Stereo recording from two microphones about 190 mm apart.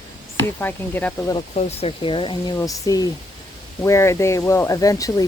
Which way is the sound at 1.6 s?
35° left (ahead or behind).